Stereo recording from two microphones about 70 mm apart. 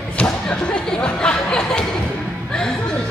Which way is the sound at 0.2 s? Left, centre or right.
Centre.